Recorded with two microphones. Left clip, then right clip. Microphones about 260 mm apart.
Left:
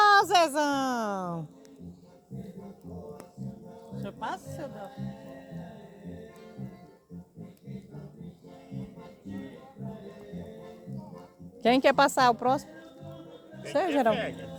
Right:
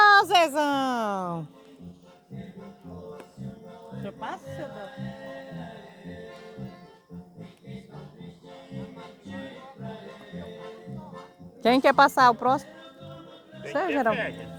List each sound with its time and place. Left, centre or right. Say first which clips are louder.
0.0 s a sound: right 3 dB; centre
4.0 s music: even; left
9.0 s music: right 3 dB; right
11.6 s speech: right 3 dB; centre
13.8 s speech: right 2 dB; centre